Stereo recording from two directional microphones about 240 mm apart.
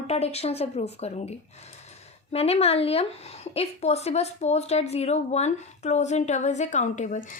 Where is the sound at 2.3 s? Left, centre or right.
Left.